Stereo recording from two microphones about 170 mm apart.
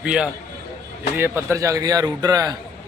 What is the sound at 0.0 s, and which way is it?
A man's voice, 5° right (ahead or behind).